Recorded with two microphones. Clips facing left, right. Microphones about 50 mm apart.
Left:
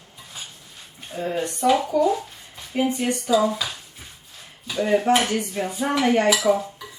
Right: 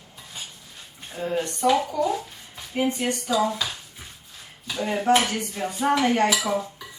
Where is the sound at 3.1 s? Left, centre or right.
Centre.